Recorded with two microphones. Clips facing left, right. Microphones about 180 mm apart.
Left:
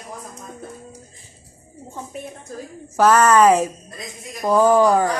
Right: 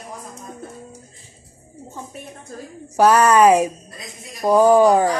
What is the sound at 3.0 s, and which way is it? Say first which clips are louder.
Speech: right 1 dB; 15° right (ahead or behind).